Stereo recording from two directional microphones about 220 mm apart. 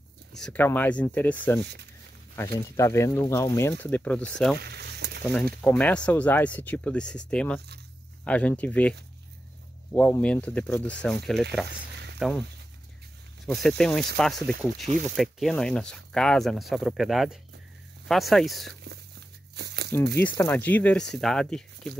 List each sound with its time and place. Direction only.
0.4 s speech: 5° left (ahead or behind)
4.6 s a sound: 50° right (ahead or behind)
5.6 s speech: 5° left (ahead or behind)
9.9 s speech: 5° left (ahead or behind)
13.5 s speech: centre (ahead or behind)
19.5 s crumpling: 50° right (ahead or behind)
20.2 s speech: 10° left (ahead or behind)